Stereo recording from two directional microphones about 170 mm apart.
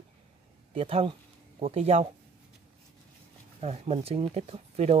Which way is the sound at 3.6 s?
35° right (ahead or behind).